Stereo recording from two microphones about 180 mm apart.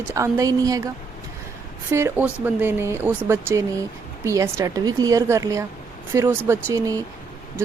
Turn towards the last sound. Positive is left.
turn(degrees=-20)  # may be behind; listen again after turning